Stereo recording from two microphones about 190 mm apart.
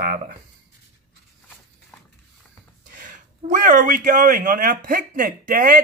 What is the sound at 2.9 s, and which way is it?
Speech, 45° right (ahead or behind).